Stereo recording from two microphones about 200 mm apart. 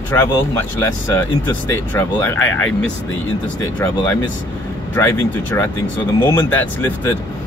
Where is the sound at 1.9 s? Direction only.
10° left (ahead or behind).